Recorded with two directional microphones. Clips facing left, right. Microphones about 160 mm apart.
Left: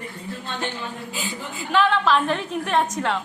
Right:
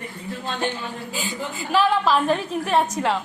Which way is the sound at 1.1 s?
Centre (ahead or behind).